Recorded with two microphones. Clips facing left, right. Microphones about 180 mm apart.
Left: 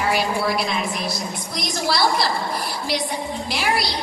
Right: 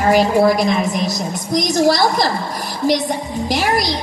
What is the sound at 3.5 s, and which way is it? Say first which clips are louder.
Speech: right 6 dB; 45° right (ahead or behind).